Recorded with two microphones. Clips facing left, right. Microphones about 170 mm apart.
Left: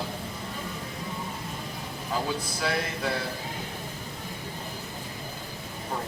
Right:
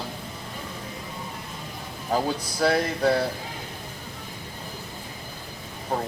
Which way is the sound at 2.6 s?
40° right (ahead or behind).